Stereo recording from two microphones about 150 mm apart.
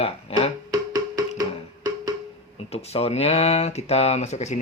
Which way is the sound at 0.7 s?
25° right (ahead or behind).